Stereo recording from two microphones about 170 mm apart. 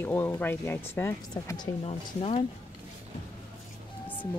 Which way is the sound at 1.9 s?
35° left (ahead or behind).